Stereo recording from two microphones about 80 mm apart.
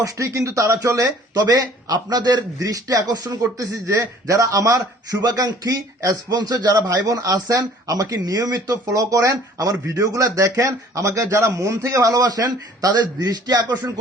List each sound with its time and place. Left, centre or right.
0.0 s a man's voice: right